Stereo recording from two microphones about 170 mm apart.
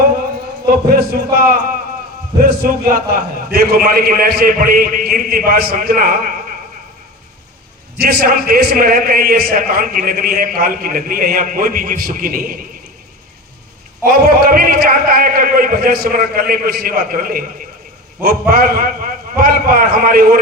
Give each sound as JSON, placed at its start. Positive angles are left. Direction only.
{"t": 0.7, "sound": "a man's voice", "side_deg": -60}
{"t": 7.9, "sound": "a man's voice", "side_deg": -65}
{"t": 14.0, "sound": "a man's voice", "side_deg": -60}